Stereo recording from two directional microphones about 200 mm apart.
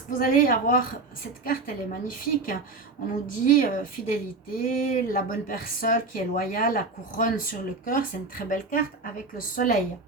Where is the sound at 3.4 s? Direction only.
45° left (ahead or behind).